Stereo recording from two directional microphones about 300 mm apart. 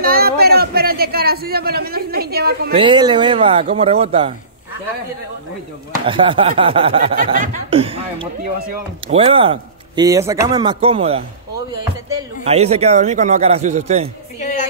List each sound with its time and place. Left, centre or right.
0.0 s a man's voice: right
2.7 s speech: centre
6.0 s speech: centre
12.4 s a man's voice: right